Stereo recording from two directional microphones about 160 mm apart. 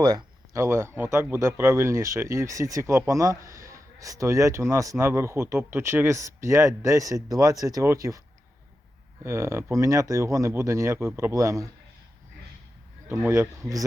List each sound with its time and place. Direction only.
0.0 s speech: 25° right (ahead or behind)
9.2 s speech: 15° right (ahead or behind)
13.1 s speech: 15° right (ahead or behind)